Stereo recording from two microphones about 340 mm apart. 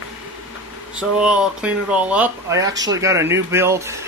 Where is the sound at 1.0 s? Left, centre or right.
Centre.